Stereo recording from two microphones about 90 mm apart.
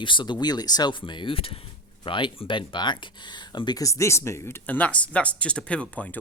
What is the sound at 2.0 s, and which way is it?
Speech, 65° left (ahead or behind).